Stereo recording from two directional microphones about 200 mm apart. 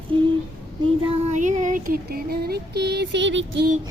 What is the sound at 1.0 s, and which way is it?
Child singing, 40° right (ahead or behind).